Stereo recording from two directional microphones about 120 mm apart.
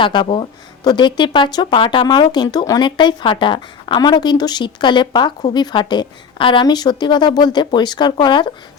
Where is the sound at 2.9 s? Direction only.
40° left (ahead or behind).